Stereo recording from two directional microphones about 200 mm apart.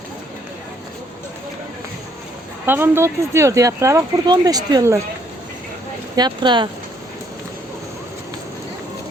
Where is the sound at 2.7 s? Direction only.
10° right (ahead or behind).